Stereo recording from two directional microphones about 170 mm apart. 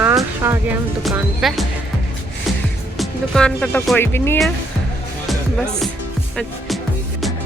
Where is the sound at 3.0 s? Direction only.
5° left (ahead or behind).